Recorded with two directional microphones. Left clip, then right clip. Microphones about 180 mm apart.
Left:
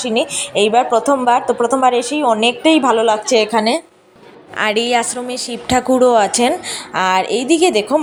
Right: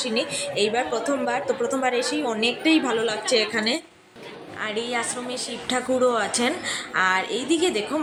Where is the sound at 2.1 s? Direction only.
25° left (ahead or behind).